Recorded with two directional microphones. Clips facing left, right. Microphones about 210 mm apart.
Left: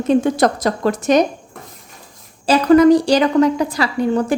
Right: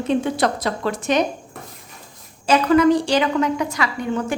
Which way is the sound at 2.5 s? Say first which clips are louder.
Left 5 dB; 40° left (ahead or behind).